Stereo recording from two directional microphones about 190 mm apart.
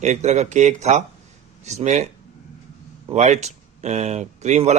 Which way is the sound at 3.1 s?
35° right (ahead or behind).